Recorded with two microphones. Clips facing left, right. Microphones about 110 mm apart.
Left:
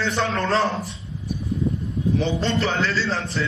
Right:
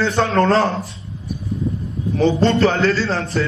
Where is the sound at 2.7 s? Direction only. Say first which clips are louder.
Right 6 dB; 50° right (ahead or behind).